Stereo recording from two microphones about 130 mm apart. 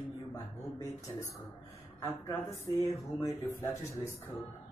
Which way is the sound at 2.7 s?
30° right (ahead or behind).